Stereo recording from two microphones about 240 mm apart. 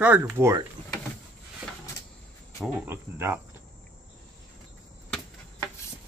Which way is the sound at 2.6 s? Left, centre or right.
Centre.